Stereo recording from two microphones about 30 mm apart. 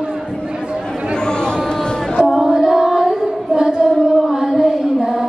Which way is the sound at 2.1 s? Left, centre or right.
Centre.